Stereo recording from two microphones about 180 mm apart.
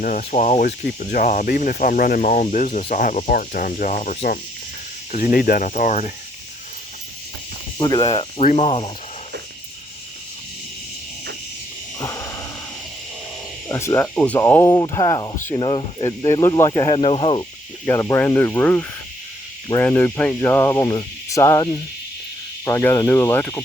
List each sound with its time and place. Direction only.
0.0 s speech: 50° left (ahead or behind)
7.8 s speech: 25° left (ahead or behind)
8.1 s speech: 35° left (ahead or behind)
11.9 s wheeze: 15° left (ahead or behind)
13.7 s speech: 15° left (ahead or behind)
16.0 s speech: 15° left (ahead or behind)
17.8 s speech: 15° left (ahead or behind)